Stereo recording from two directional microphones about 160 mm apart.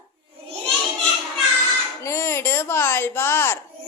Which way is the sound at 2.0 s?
15° left (ahead or behind).